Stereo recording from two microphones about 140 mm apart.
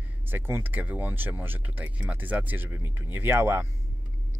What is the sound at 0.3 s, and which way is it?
Speech, 15° right (ahead or behind).